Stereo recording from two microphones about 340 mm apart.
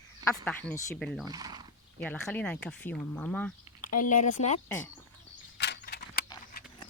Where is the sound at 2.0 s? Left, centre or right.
Centre.